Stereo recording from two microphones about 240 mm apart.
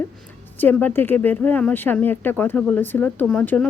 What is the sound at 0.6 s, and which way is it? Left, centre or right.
Speech, centre.